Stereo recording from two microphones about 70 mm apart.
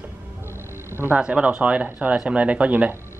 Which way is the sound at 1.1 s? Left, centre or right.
Centre.